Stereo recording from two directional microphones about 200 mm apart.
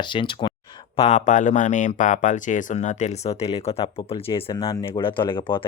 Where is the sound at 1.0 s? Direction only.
35° left (ahead or behind).